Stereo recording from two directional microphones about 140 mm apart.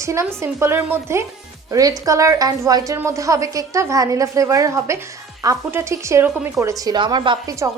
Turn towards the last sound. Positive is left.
turn(degrees=-35)  # may be behind; listen again after turning